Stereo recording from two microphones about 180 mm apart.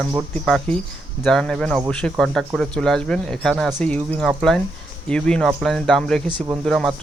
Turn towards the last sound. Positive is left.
turn(degrees=0)  # may be behind; listen again after turning